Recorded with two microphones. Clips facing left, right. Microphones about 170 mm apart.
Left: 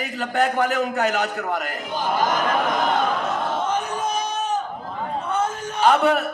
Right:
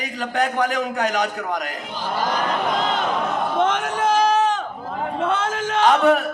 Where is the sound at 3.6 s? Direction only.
90° right.